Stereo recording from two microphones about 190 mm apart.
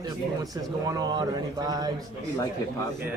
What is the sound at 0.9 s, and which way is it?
Speech, 20° right (ahead or behind).